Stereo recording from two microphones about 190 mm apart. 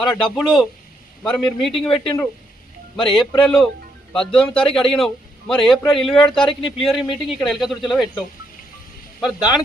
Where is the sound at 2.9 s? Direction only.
5° left (ahead or behind).